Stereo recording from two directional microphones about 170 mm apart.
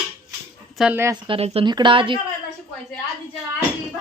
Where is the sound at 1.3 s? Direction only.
35° right (ahead or behind).